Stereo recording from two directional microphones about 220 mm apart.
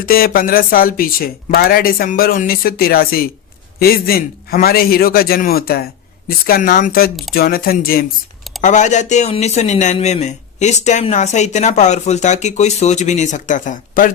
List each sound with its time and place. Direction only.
0.0 s a man's voice: 40° left (ahead or behind)